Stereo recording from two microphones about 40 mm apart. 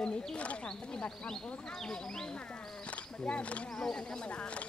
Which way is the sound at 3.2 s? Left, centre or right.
Left.